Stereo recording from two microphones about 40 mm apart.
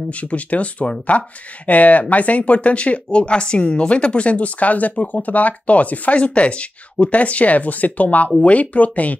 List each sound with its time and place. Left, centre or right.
0.1 s speech: left